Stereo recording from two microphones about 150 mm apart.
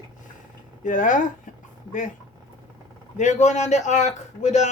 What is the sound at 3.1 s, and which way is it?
A man's voice, 50° left (ahead or behind).